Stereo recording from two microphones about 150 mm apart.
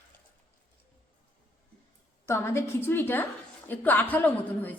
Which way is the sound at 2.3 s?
20° left (ahead or behind).